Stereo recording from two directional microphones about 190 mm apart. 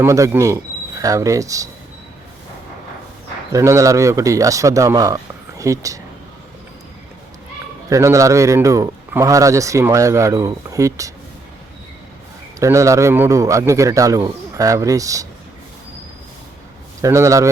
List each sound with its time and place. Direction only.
0.0 s speech: 15° right (ahead or behind)
3.5 s a man's voice: 15° right (ahead or behind)
7.9 s a man's voice: 15° right (ahead or behind)
12.5 s a man's voice: 15° right (ahead or behind)
17.0 s a man's voice: 15° right (ahead or behind)